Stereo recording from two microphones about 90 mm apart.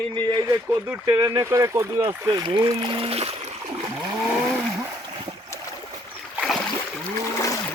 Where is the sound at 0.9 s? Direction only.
30° right (ahead or behind).